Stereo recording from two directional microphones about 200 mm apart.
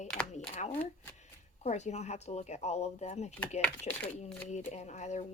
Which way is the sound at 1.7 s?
35° left (ahead or behind).